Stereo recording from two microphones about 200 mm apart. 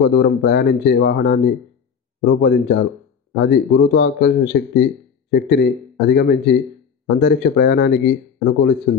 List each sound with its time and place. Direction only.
0.0 s speech: 55° left (ahead or behind)